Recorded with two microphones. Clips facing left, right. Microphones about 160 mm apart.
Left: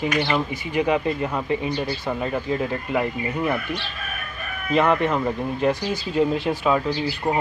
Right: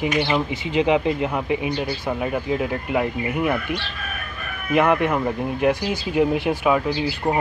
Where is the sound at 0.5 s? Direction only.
20° right (ahead or behind).